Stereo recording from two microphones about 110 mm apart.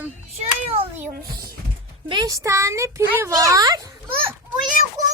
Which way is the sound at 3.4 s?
30° right (ahead or behind).